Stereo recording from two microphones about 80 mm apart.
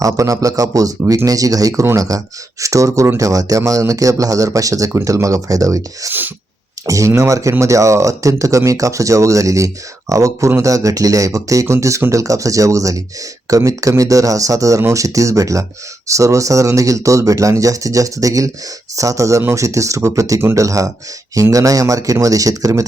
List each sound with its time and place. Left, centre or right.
0.0 s speech: right
6.1 s wail: right
6.8 s speech: right